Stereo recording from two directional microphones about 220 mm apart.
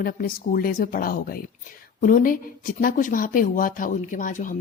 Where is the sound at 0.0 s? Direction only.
40° left (ahead or behind).